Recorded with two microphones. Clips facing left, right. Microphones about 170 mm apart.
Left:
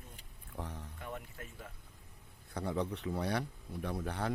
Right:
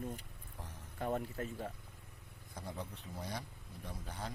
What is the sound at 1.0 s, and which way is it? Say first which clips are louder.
Speech: right 10 dB; 35° right (ahead or behind).